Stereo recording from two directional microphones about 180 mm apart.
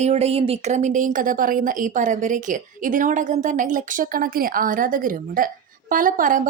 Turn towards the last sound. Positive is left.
turn(degrees=-50)  # may be behind; listen again after turning